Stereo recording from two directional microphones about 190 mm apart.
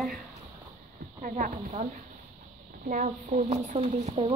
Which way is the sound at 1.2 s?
45° right (ahead or behind).